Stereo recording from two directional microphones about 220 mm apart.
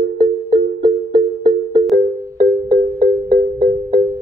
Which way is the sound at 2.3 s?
20° right (ahead or behind).